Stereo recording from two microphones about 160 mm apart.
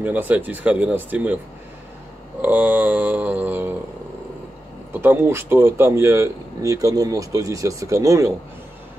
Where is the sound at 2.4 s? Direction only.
10° right (ahead or behind).